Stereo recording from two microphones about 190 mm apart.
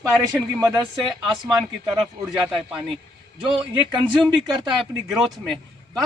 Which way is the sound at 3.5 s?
25° right (ahead or behind).